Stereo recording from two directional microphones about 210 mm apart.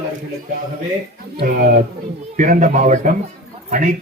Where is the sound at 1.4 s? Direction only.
45° right (ahead or behind).